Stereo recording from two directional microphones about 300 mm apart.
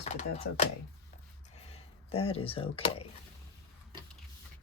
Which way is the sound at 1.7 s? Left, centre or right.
Centre.